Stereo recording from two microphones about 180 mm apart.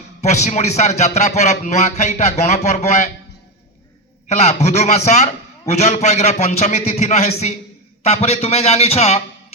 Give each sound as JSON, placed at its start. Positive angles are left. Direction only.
{"t": 0.2, "sound": "a man's voice", "side_deg": 40}
{"t": 4.4, "sound": "a man's voice", "side_deg": 40}